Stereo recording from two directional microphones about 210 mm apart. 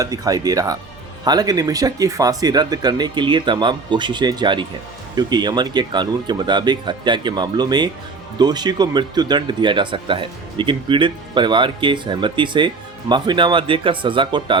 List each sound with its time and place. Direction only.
0.0 s speech: 15° right (ahead or behind)